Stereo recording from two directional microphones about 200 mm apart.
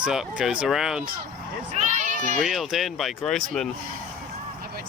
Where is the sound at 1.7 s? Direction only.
35° right (ahead or behind).